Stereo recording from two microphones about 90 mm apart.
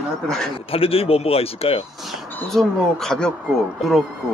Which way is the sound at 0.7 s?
90° left.